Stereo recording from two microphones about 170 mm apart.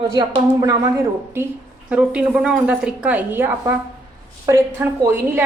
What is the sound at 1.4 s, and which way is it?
A woman's voice, 15° right (ahead or behind).